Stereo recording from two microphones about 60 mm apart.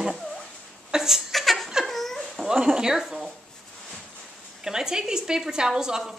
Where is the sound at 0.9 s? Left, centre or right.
Centre.